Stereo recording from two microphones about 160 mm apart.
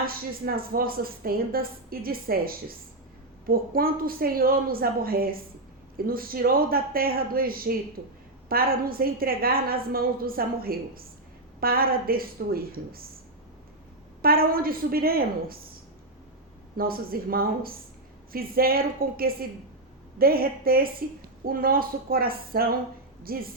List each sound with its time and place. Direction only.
0.0 s a woman's voice: 65° right (ahead or behind)
14.2 s a woman's voice: 70° right (ahead or behind)
16.7 s a woman's voice: 65° right (ahead or behind)